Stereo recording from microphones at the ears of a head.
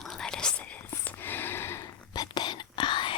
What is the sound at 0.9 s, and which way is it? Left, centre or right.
Whispering, left.